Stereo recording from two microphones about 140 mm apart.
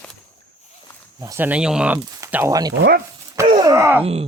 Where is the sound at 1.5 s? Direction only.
5° right (ahead or behind).